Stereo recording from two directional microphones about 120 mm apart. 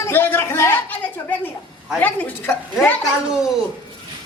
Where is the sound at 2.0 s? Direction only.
15° left (ahead or behind).